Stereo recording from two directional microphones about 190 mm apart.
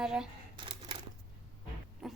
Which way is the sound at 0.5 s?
25° right (ahead or behind).